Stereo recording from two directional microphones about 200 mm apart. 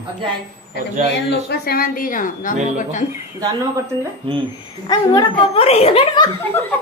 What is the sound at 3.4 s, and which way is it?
Speech, 20° right (ahead or behind).